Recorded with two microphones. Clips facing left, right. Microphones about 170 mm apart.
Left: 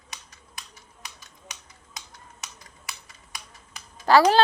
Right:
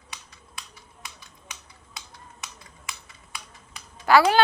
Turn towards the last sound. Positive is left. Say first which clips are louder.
# left 1 dB
turn(degrees=35)  # may be behind; listen again after turning